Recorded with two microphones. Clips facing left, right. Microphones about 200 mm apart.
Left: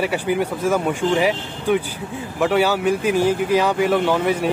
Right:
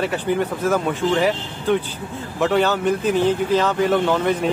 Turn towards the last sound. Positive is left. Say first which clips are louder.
# even
turn(degrees=10)  # may be behind; listen again after turning